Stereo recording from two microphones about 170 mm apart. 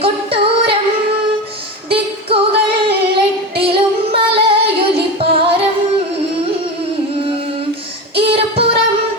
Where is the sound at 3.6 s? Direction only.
35° right (ahead or behind).